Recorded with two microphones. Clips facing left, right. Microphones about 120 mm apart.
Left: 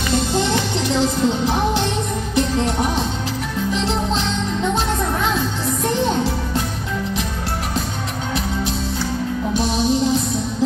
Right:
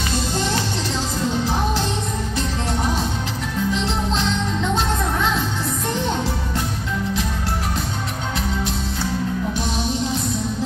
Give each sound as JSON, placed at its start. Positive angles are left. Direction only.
{"t": 0.4, "sound": "music", "side_deg": 20}